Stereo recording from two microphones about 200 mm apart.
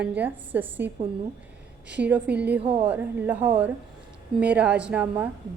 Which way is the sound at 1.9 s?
5° right (ahead or behind).